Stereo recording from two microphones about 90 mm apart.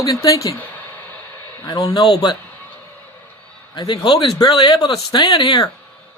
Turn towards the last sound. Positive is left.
turn(degrees=55)  # may be behind; listen again after turning